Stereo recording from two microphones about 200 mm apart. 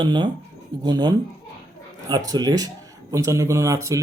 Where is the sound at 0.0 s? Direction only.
25° right (ahead or behind).